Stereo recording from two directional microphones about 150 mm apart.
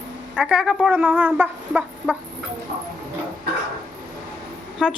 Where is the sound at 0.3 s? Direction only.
5° right (ahead or behind).